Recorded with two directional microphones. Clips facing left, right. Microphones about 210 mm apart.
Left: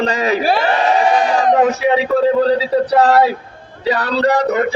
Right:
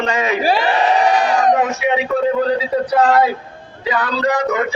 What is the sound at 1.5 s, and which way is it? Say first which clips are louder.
A man's voice: left 3 dB; 35° left (ahead or behind).